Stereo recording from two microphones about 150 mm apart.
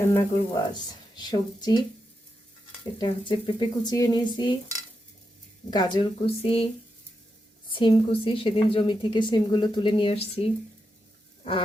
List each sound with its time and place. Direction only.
0.0 s speech: 15° left (ahead or behind)
0.7 s speech: 30° left (ahead or behind)
3.0 s a woman's voice: 30° left (ahead or behind)
5.7 s a woman's voice: 30° left (ahead or behind)
7.7 s a woman's voice: 35° left (ahead or behind)